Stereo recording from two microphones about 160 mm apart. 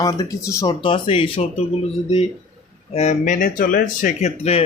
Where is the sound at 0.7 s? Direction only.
35° left (ahead or behind).